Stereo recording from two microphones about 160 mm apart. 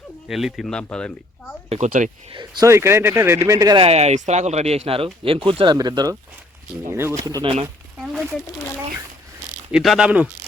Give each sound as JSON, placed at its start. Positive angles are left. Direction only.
{"t": 0.3, "sound": "speech", "side_deg": 0}
{"t": 1.7, "sound": "speech", "side_deg": -50}
{"t": 2.3, "sound": "speech", "side_deg": -25}
{"t": 3.8, "sound": "speech", "side_deg": -40}
{"t": 7.9, "sound": "a sound", "side_deg": 0}
{"t": 9.7, "sound": "speech", "side_deg": -5}